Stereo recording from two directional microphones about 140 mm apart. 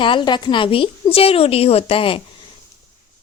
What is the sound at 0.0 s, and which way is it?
A woman's voice, 35° left (ahead or behind).